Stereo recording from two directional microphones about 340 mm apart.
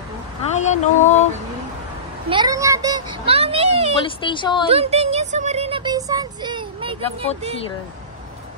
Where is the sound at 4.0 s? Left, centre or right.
Centre.